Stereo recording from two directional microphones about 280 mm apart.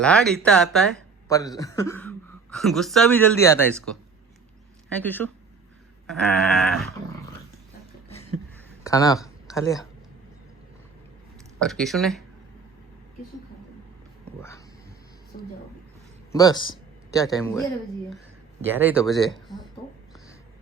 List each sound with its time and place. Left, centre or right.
0.0 s speech: centre
4.9 s speech: centre
8.8 s a sound: centre
11.6 s speech: centre
15.3 s a woman's voice: left
16.3 s a sound: centre
17.2 s speech: centre
18.7 s speech: centre